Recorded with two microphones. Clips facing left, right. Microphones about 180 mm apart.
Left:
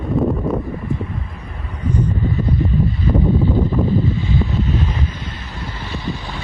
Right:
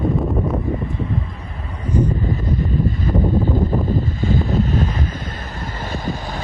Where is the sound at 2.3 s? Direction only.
45° right (ahead or behind).